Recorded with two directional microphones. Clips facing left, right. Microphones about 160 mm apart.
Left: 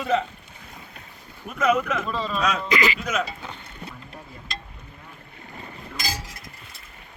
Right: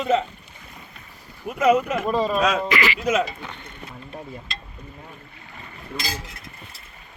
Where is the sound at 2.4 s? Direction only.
30° right (ahead or behind).